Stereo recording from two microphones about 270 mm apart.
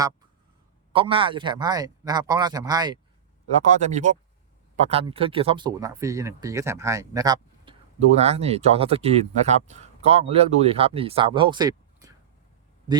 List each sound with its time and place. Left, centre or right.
0.9 s speech: centre
3.5 s speech: right